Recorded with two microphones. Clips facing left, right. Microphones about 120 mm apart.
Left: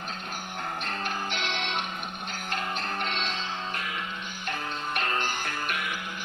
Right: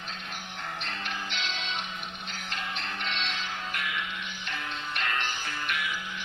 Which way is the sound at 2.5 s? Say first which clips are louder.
Left 5 dB; 45° left (ahead or behind).